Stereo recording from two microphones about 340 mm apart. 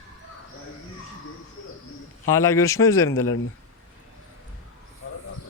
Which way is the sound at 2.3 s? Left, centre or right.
Centre.